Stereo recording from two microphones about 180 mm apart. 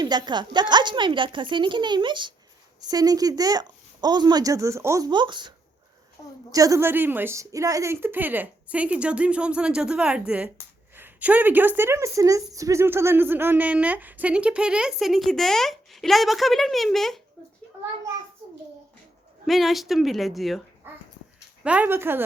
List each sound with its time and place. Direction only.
0.0 s a woman's voice: 25° right (ahead or behind); by 17.2 s centre (ahead or behind)
19.5 s a woman's voice: centre (ahead or behind)
20.9 s dog: 10° right (ahead or behind)
21.6 s a woman's voice: 5° right (ahead or behind)